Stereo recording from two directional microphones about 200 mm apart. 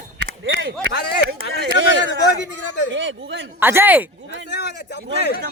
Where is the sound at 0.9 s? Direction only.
55° left (ahead or behind).